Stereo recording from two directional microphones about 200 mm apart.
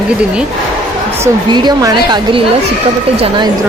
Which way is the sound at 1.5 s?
20° right (ahead or behind).